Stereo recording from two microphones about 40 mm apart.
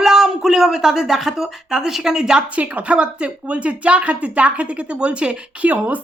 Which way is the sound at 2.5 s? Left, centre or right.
Right.